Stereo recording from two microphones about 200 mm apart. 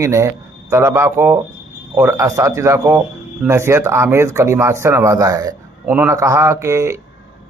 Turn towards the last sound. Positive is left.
turn(degrees=-15)  # may be behind; listen again after turning